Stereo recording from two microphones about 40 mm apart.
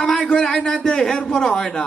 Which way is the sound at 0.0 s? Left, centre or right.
Centre.